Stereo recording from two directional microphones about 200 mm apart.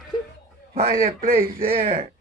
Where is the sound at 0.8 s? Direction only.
45° right (ahead or behind).